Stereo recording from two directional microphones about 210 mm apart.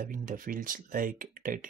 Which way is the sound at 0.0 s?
40° right (ahead or behind).